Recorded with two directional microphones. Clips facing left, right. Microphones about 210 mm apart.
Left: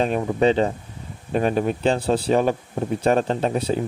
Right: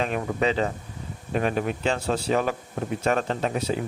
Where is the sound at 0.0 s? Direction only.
35° left (ahead or behind).